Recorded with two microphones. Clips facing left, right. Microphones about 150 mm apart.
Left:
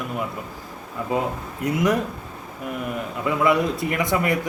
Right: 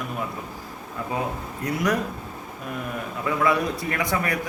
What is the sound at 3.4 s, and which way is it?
Speech, 20° left (ahead or behind).